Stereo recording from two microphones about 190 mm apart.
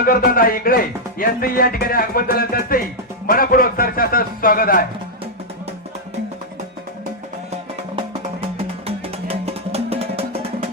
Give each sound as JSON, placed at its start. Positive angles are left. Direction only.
{"t": 0.0, "sound": "speech", "side_deg": 50}
{"t": 7.9, "sound": "music", "side_deg": -30}